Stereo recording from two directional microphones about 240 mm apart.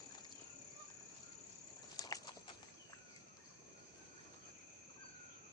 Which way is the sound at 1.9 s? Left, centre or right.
Centre.